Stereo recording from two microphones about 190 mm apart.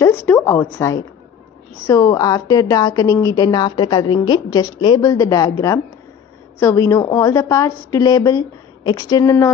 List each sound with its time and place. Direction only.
0.0 s a woman's voice: 15° left (ahead or behind)